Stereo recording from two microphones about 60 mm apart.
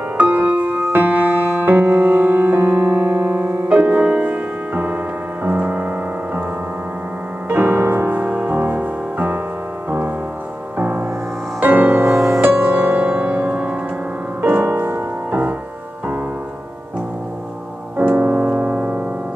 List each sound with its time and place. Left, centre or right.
0.2 s music: right
7.4 s music: right
17.9 s piano: right